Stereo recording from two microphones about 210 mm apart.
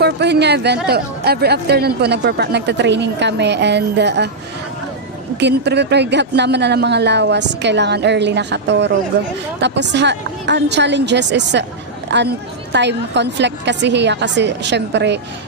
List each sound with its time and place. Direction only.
0.0 s a woman's voice: 55° right (ahead or behind)
5.4 s speech: 55° right (ahead or behind)